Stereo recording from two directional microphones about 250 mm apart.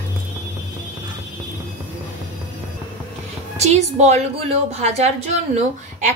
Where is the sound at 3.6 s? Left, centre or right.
Right.